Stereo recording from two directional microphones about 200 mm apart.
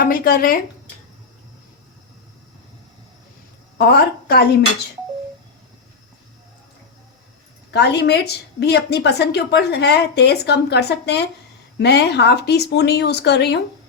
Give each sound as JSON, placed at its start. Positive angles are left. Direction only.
{"t": 0.0, "sound": "a woman's voice", "side_deg": 45}
{"t": 3.8, "sound": "a woman's voice", "side_deg": 50}
{"t": 7.7, "sound": "a woman's voice", "side_deg": 55}